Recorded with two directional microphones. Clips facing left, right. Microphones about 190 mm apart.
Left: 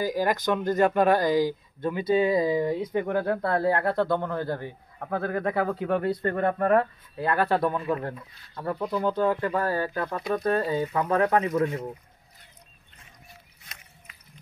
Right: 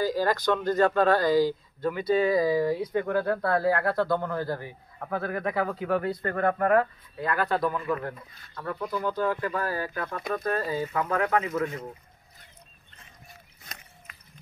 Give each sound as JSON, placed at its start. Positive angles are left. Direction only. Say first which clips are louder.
{"t": 0.0, "sound": "speech", "louder": "even", "side_deg": 15}
{"t": 11.2, "sound": "speech", "louder": "left 3 dB", "side_deg": 35}